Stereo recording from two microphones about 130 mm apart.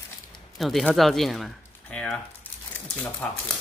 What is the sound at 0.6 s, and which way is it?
Speech, centre (ahead or behind).